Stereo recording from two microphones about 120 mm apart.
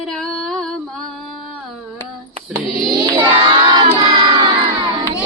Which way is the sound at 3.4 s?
40° right (ahead or behind).